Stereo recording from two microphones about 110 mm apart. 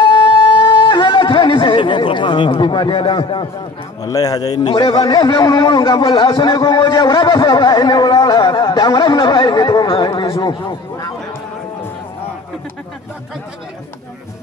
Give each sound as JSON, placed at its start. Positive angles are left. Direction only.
{"t": 0.0, "sound": "music", "side_deg": 45}
{"t": 4.0, "sound": "speech", "side_deg": 35}